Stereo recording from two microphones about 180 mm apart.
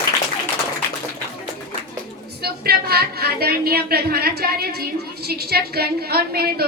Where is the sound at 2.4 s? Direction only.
60° right (ahead or behind).